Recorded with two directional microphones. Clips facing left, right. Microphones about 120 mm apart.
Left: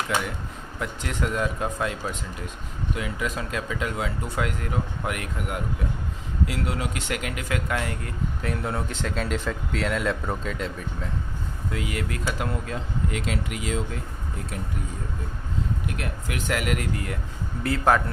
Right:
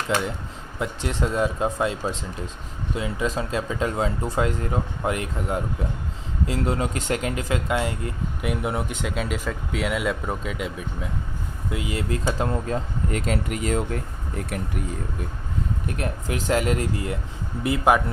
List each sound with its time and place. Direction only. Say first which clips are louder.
0.8 s speech: right 3 dB; 20° right (ahead or behind)
11.7 s speech: right 3 dB; 20° right (ahead or behind); by 14.0 s 50° right (ahead or behind)
15.9 s speech: right 4 dB; 35° right (ahead or behind); by 18.0 s 15° right (ahead or behind)